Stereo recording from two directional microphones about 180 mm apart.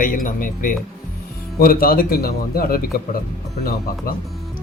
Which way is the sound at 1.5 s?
55° left (ahead or behind).